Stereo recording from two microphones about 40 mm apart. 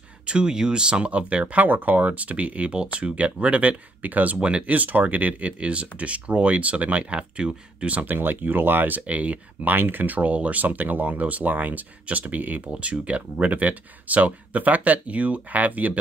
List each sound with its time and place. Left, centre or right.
0.3 s speech: right
4.4 s speech: right
4.6 s speech: right
8.1 s speech: right
9.0 s speech: right
12.8 s speech: right